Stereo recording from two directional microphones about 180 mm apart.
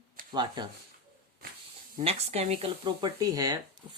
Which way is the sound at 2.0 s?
35° right (ahead or behind).